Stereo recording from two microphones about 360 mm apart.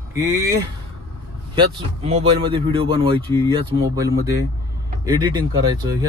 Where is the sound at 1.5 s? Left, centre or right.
Centre.